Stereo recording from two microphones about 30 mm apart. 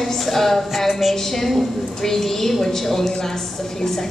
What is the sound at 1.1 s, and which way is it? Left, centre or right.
A woman's voice, centre.